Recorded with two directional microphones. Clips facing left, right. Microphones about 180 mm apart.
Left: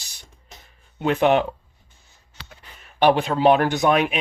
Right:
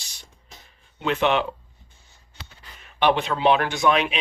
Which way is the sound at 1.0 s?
45° left (ahead or behind).